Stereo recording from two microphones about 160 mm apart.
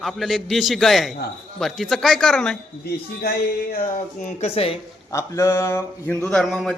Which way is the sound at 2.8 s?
80° left.